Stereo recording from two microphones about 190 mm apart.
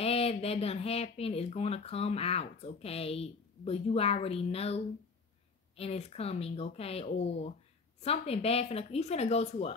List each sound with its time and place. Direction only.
0.0 s speech: 30° left (ahead or behind)